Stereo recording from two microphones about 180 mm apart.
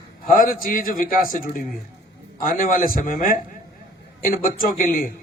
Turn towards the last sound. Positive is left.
turn(degrees=50)  # may be behind; listen again after turning